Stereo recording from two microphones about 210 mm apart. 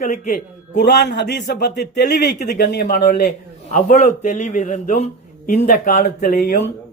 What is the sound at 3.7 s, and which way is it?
A man's voice, 35° left (ahead or behind).